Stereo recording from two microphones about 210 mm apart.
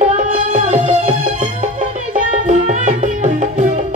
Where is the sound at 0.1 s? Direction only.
40° right (ahead or behind).